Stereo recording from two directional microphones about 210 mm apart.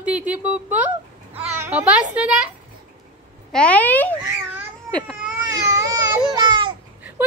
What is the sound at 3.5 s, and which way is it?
Speech, 5° left (ahead or behind).